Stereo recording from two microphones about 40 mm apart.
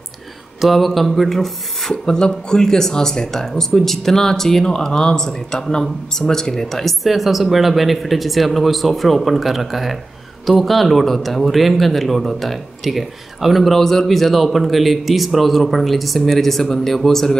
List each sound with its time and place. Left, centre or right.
0.6 s speech: centre